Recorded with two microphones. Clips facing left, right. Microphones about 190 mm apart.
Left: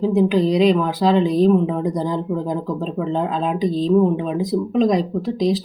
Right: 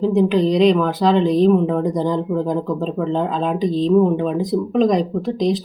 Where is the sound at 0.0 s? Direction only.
Centre (ahead or behind).